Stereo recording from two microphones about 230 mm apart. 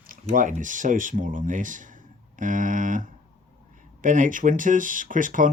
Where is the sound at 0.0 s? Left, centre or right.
Right.